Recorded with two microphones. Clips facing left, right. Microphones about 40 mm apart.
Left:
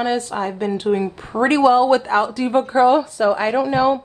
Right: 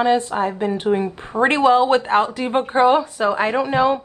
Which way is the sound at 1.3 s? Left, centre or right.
Right.